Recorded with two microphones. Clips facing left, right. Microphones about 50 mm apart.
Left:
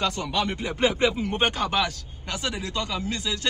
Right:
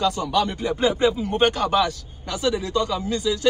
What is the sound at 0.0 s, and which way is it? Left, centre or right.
Speech, left.